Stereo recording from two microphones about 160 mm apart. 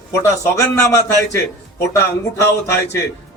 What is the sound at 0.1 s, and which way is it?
A man's voice, 20° left (ahead or behind).